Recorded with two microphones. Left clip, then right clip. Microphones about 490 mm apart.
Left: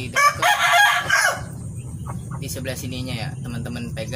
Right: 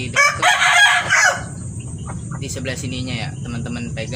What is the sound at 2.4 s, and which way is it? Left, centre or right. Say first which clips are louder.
Speech: right 4 dB; left.